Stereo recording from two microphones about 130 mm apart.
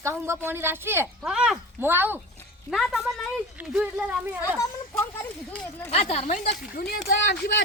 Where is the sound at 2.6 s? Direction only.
Centre (ahead or behind).